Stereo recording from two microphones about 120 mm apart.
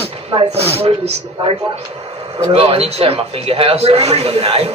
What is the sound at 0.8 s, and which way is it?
Speech, 55° right (ahead or behind).